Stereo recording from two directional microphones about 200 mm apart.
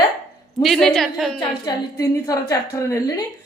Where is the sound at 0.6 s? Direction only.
Centre (ahead or behind).